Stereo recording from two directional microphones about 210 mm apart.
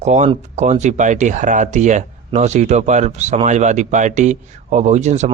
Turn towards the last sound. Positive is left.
turn(degrees=-35)  # may be behind; listen again after turning